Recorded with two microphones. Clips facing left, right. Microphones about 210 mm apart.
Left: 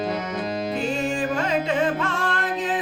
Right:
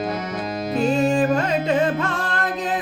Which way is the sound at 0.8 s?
40° right (ahead or behind).